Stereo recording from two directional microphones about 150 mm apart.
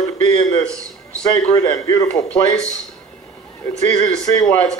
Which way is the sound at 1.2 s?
25° left (ahead or behind).